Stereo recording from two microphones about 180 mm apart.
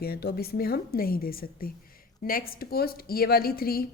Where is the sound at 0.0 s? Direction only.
60° left (ahead or behind).